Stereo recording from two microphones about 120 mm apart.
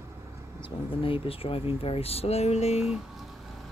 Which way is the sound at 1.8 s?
55° left (ahead or behind).